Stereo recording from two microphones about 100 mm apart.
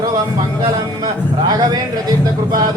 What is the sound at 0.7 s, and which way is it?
Music, 40° right (ahead or behind).